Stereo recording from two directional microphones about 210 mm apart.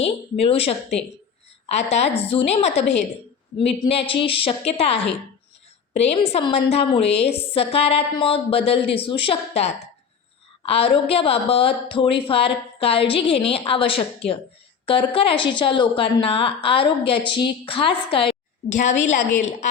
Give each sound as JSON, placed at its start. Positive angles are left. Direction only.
{"t": 0.0, "sound": "a woman's voice", "side_deg": 30}